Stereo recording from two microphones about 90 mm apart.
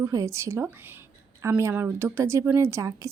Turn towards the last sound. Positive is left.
turn(degrees=-35)  # may be behind; listen again after turning